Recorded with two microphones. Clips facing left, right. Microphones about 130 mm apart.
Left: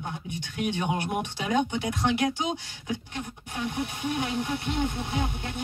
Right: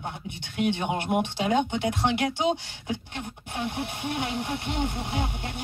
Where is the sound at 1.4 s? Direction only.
25° right (ahead or behind).